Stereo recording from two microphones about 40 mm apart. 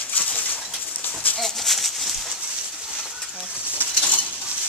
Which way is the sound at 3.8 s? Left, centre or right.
Right.